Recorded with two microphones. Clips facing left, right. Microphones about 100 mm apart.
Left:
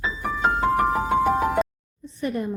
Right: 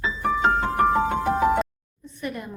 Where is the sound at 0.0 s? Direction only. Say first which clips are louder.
Right 2 dB; centre (ahead or behind).